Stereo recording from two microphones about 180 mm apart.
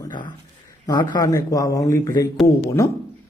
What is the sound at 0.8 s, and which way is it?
Speech, 25° left (ahead or behind).